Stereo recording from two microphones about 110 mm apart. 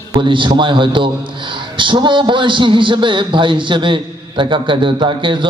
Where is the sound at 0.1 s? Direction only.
50° right (ahead or behind).